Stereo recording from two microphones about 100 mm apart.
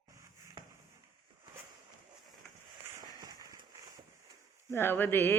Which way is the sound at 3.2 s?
40° right (ahead or behind).